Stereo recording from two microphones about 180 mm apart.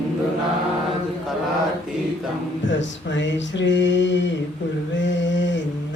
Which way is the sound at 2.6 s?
90° left.